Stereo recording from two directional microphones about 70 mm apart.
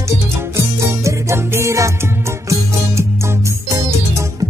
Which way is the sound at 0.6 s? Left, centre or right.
Right.